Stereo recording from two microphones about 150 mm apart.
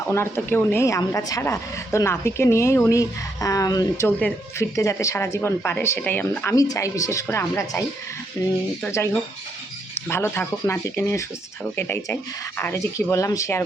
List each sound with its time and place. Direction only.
0.1 s speech: 15° left (ahead or behind)
9.9 s speech: 15° left (ahead or behind)